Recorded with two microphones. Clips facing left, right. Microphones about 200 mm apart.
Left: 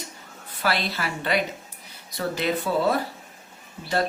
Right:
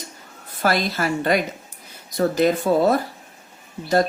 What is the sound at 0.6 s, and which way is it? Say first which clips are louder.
Speech: right 5 dB; 45° right (ahead or behind).